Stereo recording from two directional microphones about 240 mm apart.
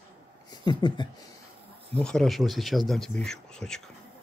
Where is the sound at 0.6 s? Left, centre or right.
Centre.